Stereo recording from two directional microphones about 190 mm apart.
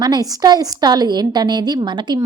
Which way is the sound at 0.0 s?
20° right (ahead or behind).